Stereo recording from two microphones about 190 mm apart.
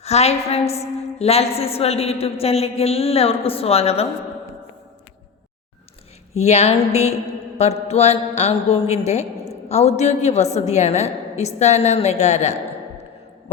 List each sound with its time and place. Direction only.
0.0 s a woman's voice: 35° left (ahead or behind)
6.4 s a woman's voice: 35° left (ahead or behind)